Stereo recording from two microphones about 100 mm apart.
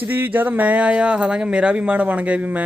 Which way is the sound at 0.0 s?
20° right (ahead or behind).